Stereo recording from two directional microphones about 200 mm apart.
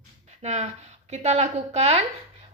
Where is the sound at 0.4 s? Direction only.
35° right (ahead or behind).